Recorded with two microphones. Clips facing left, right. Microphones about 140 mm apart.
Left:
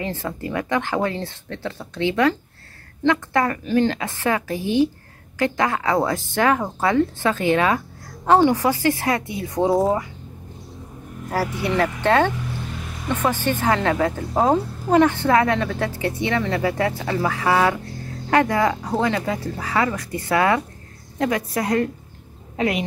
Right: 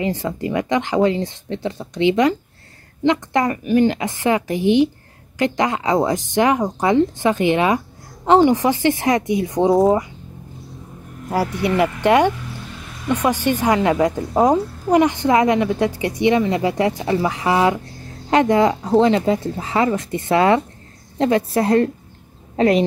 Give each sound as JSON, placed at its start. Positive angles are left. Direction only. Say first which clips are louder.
{"t": 0.0, "sound": "a woman's voice", "louder": "right 5 dB", "side_deg": -15}
{"t": 11.6, "sound": "a woman's voice", "louder": "right 4 dB", "side_deg": -15}